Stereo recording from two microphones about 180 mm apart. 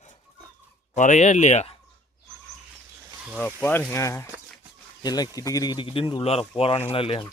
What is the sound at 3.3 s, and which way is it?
Speech, 10° left (ahead or behind).